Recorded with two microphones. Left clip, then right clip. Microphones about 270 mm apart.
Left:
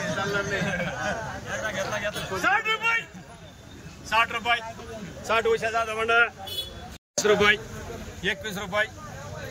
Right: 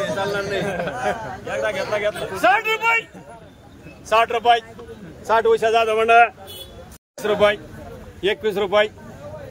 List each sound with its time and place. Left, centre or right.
0.0 s a sound: right
0.6 s a man's voice: right
2.4 s a man's voice: right
4.1 s a man's voice: right